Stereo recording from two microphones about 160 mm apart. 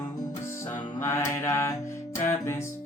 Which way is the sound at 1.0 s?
15° left (ahead or behind).